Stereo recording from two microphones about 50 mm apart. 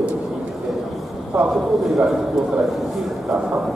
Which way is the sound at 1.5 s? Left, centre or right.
Centre.